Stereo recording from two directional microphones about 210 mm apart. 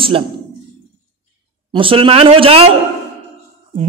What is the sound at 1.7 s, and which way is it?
A man's voice, 25° right (ahead or behind).